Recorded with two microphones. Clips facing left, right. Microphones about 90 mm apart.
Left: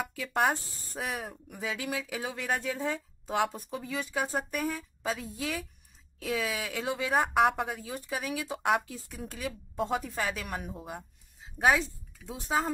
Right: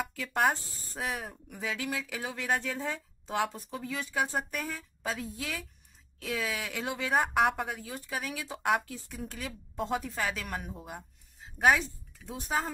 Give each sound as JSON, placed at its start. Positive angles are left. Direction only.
{"t": 0.1, "sound": "speech", "side_deg": 10}
{"t": 7.7, "sound": "speech", "side_deg": 15}